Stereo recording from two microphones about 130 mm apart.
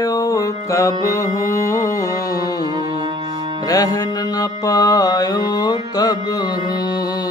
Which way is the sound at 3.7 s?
30° left (ahead or behind).